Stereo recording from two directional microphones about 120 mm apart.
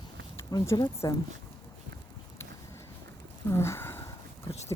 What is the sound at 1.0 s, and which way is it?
Speech, 30° left (ahead or behind).